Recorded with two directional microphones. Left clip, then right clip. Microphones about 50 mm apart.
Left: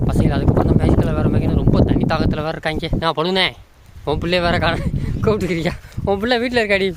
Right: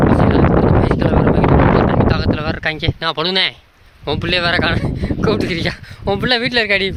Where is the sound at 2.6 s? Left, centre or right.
Left.